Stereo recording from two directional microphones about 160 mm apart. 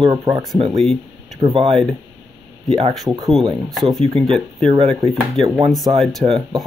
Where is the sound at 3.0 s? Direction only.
20° right (ahead or behind).